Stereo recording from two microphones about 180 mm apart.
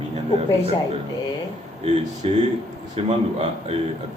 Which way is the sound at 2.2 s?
30° right (ahead or behind).